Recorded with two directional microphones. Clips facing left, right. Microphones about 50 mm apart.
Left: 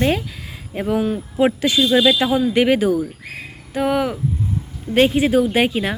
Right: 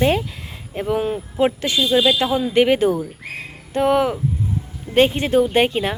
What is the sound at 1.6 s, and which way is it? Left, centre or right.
Speech, left.